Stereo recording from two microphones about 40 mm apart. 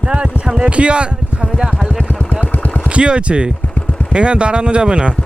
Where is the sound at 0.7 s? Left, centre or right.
Right.